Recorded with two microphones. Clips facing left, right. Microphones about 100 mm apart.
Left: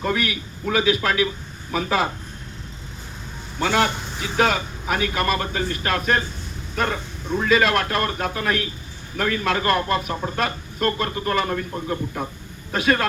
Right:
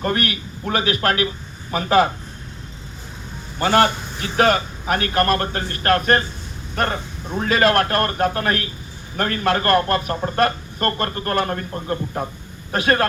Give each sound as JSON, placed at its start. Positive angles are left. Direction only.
{"t": 0.0, "sound": "a man's voice", "side_deg": -60}
{"t": 3.6, "sound": "a man's voice", "side_deg": -55}
{"t": 7.4, "sound": "a man's voice", "side_deg": -50}